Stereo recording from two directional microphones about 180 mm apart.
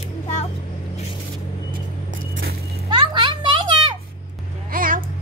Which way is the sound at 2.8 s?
25° right (ahead or behind).